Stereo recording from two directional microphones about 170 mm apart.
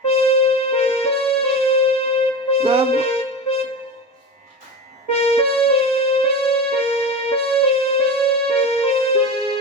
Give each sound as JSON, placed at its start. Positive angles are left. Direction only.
{"t": 0.0, "sound": "music", "side_deg": 35}
{"t": 5.1, "sound": "music", "side_deg": 35}